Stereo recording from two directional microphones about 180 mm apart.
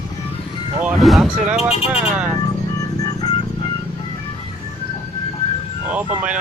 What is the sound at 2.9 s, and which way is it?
Music, 20° left (ahead or behind).